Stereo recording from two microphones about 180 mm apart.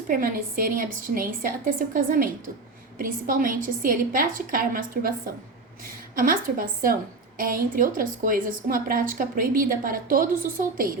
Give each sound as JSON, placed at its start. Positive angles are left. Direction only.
{"t": 0.1, "sound": "a woman's voice", "side_deg": -50}